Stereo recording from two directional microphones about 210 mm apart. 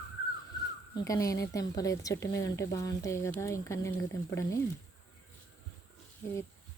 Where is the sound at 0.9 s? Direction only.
15° left (ahead or behind).